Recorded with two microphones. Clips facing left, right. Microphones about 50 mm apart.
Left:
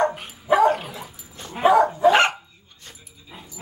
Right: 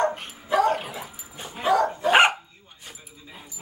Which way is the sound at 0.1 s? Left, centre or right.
Centre.